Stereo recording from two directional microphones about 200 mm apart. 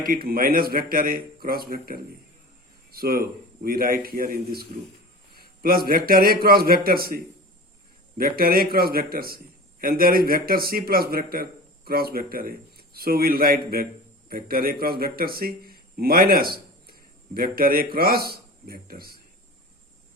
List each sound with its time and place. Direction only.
0.1 s a man's voice: 45° right (ahead or behind)
8.2 s a man's voice: 45° right (ahead or behind)